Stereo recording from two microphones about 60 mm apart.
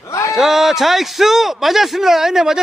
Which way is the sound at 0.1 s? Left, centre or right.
Left.